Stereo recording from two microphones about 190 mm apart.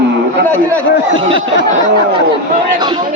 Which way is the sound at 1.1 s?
30° right (ahead or behind).